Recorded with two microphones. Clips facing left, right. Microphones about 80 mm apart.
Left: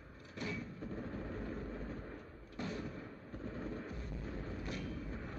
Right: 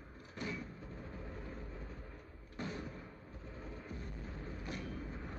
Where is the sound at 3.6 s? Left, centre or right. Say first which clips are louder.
Left 4 dB; left.